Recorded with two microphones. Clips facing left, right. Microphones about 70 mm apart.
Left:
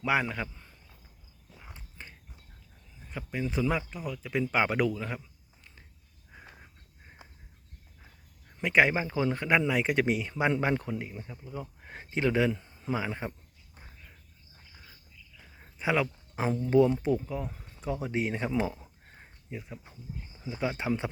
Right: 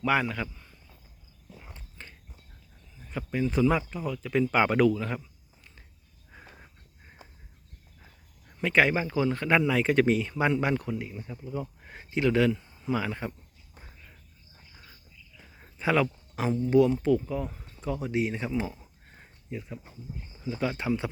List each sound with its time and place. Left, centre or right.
0.0 s a man's voice: centre
1.7 s a sound: centre
3.1 s speech: centre
8.6 s speech: centre
10.5 s speech: left
12.3 s a man's voice: left
12.5 s a sound: left
13.0 s a man's voice: left
15.8 s speech: centre
16.6 s a man's voice: left
17.7 s a sound: centre
18.0 s speech: left
20.4 s a man's voice: left